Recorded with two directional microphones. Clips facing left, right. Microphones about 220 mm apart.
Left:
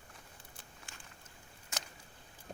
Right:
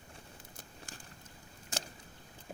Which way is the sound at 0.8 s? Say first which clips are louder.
Right 5 dB; 35° right (ahead or behind).